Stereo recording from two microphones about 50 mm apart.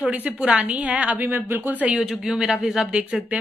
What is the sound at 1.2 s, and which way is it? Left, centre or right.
Speech, right.